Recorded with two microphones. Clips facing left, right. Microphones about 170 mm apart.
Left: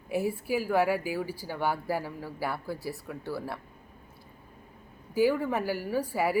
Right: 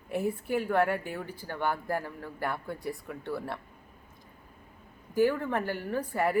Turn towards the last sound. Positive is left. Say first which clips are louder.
# left 1 dB
turn(degrees=5)  # may be behind; listen again after turning